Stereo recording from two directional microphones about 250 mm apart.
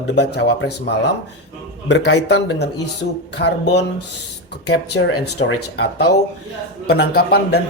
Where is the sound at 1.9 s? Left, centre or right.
Left.